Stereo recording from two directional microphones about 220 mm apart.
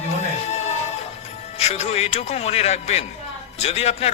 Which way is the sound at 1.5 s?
30° left (ahead or behind).